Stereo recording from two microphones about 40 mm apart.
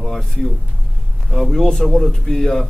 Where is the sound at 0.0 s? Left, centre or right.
Centre.